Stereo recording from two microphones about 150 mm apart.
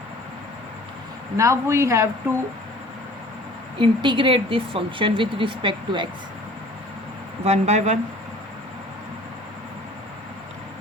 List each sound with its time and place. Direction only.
1.4 s speech: 15° right (ahead or behind)
3.8 s speech: 35° right (ahead or behind)
7.4 s speech: 45° right (ahead or behind)